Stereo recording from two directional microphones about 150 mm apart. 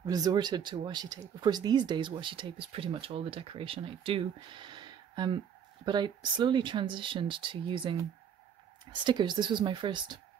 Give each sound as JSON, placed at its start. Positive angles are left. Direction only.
{"t": 0.0, "sound": "speech", "side_deg": -25}
{"t": 9.0, "sound": "speech", "side_deg": -30}